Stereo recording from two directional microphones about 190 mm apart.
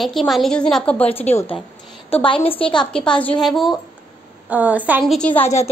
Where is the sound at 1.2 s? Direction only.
35° left (ahead or behind).